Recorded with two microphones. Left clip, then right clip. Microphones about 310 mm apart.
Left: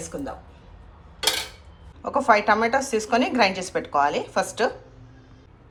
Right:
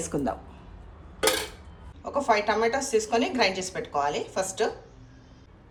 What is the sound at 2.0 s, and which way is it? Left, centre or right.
A woman's voice, centre.